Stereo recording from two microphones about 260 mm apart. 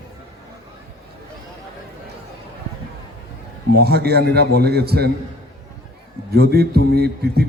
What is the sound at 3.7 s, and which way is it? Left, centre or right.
A man's voice, right.